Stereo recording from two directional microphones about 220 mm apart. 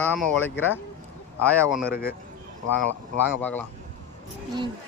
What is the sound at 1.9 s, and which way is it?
Speech, 45° left (ahead or behind).